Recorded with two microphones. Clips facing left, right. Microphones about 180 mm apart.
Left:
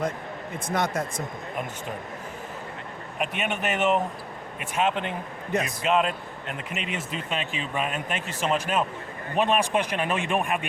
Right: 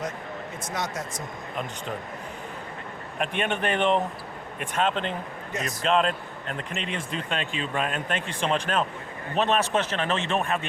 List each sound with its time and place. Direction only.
0.7 s speech: 55° left (ahead or behind)
3.2 s speech: 5° left (ahead or behind)